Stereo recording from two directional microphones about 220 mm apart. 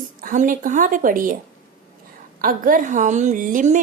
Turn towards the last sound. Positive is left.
turn(degrees=-35)  # may be behind; listen again after turning